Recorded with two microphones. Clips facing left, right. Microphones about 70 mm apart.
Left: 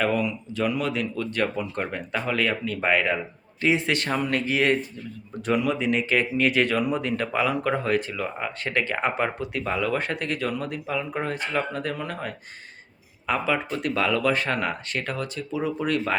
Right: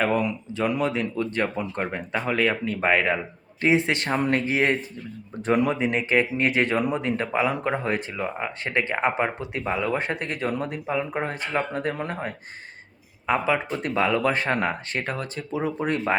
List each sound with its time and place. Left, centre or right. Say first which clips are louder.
0.0 s speech: right 1 dB; right